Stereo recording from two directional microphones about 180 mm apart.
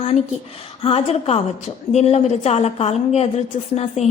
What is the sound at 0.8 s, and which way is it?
A woman's voice, 35° left (ahead or behind).